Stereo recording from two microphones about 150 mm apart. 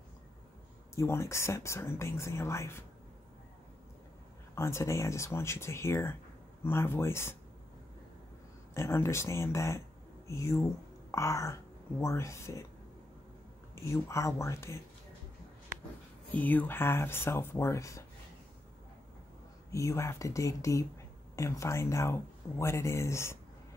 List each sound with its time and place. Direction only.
0.9 s speech: 20° left (ahead or behind)
4.6 s speech: 20° left (ahead or behind)
8.7 s speech: 20° left (ahead or behind)
13.7 s speech: 20° left (ahead or behind)
16.3 s speech: 10° left (ahead or behind)
19.7 s speech: 20° left (ahead or behind)